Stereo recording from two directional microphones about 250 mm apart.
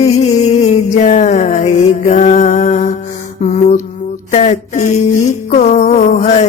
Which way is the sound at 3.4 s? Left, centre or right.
Left.